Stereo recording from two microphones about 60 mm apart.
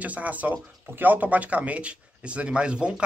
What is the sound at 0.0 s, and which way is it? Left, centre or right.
Speech, right.